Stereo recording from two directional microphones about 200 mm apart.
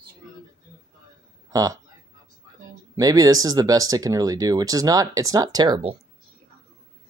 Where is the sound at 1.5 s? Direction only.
15° right (ahead or behind).